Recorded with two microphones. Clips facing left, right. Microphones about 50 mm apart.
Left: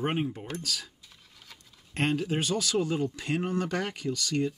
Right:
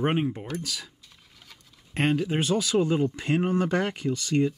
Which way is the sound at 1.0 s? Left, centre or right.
Centre.